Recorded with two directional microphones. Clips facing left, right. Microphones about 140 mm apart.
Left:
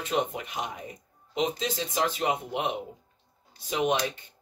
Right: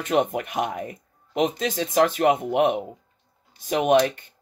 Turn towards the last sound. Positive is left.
turn(degrees=-60)  # may be behind; listen again after turning